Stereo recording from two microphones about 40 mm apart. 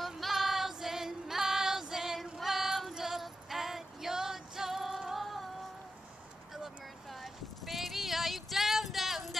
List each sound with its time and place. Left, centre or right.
0.0 s music: centre
2.3 s child singing: centre
3.0 s music: centre
7.1 s clip-clop: centre